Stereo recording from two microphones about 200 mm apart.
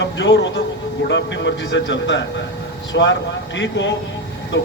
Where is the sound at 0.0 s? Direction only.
65° left (ahead or behind).